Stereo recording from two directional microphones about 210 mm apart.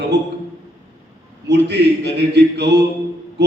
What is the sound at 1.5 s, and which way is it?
A man's voice, 55° right (ahead or behind).